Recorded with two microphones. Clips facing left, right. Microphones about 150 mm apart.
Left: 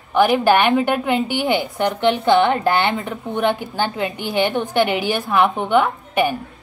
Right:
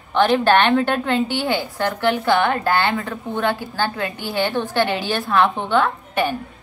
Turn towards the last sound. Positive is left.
turn(degrees=15)  # may be behind; listen again after turning